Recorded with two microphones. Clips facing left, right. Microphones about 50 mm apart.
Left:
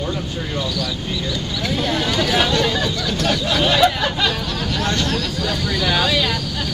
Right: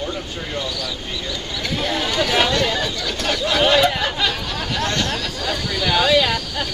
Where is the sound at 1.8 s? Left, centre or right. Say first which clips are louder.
Even; centre.